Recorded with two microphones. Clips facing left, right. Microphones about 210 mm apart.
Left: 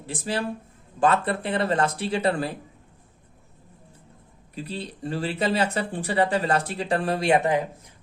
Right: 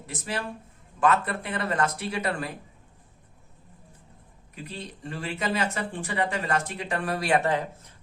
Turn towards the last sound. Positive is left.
turn(degrees=15)  # may be behind; listen again after turning